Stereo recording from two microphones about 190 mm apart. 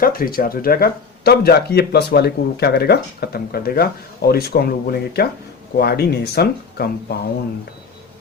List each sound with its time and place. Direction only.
0.0 s speech: 50° left (ahead or behind)